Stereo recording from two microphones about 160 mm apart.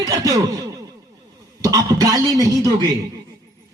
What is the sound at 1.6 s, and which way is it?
A man's voice, 20° right (ahead or behind).